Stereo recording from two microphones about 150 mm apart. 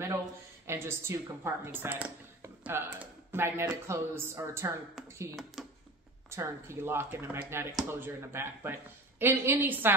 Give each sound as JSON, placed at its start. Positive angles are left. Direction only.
{"t": 0.7, "sound": "speech", "side_deg": -15}
{"t": 5.6, "sound": "a sound", "side_deg": 0}
{"t": 6.3, "sound": "speech", "side_deg": -15}